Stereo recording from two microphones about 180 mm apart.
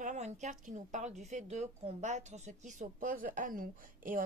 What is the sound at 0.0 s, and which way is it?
Speech, 40° right (ahead or behind).